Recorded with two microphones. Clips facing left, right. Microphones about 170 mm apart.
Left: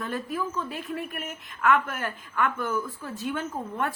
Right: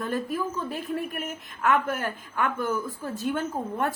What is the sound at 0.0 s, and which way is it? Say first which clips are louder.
A woman's voice: right 2 dB; 45° right (ahead or behind).